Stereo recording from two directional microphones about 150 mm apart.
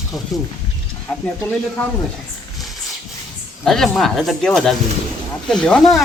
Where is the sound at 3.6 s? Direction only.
Centre (ahead or behind).